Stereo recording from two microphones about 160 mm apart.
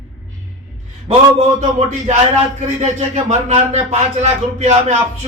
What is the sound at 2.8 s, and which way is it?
Speech, 45° right (ahead or behind).